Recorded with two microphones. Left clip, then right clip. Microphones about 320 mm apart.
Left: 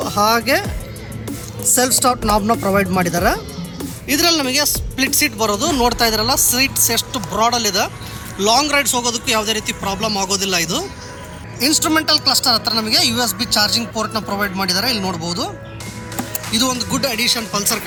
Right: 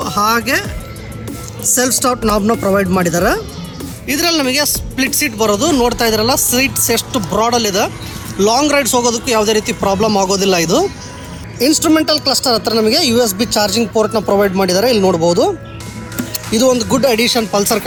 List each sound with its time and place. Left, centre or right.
0.0 s speech: centre